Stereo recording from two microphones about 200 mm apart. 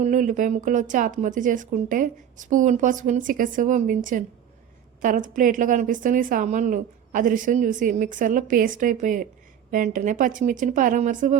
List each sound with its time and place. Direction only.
0.0 s speech: 40° right (ahead or behind)